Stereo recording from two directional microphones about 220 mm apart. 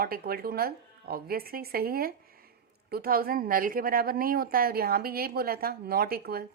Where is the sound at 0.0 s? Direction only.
45° right (ahead or behind).